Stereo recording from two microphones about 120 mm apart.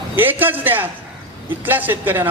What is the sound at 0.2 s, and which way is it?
A man's voice, 15° right (ahead or behind).